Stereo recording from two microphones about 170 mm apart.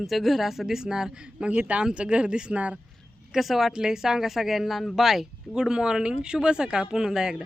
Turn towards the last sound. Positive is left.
turn(degrees=-5)  # may be behind; listen again after turning